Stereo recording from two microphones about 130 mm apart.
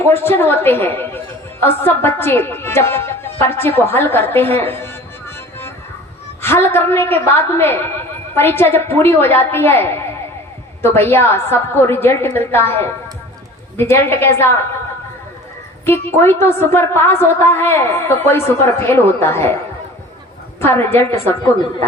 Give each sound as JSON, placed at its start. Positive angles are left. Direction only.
{"t": 0.0, "sound": "a woman's voice", "side_deg": 20}
{"t": 6.4, "sound": "a woman's voice", "side_deg": 20}
{"t": 15.9, "sound": "a woman's voice", "side_deg": 20}
{"t": 20.6, "sound": "a woman's voice", "side_deg": 20}